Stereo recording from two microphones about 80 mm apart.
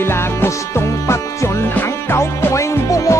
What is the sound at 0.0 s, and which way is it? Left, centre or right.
Music, left.